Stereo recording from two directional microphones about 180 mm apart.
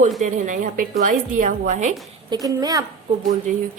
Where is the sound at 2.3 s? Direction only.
20° right (ahead or behind).